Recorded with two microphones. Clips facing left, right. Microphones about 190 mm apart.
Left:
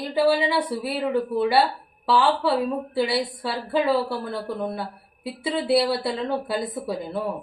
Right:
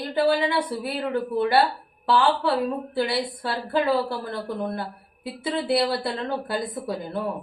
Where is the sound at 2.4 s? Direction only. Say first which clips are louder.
Left 1 dB; centre (ahead or behind).